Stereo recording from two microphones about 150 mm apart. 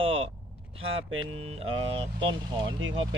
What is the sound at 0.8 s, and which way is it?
Speech, 40° right (ahead or behind).